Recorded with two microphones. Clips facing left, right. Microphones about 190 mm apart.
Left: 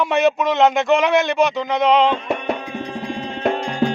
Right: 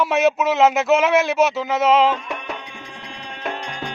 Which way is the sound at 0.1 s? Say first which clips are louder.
Left 1 dB; centre (ahead or behind).